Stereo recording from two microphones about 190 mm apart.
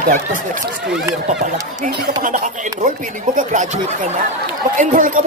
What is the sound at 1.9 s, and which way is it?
Speech, 60° right (ahead or behind).